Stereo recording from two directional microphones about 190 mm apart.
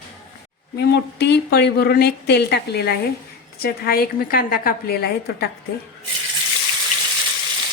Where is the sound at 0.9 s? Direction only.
60° left (ahead or behind).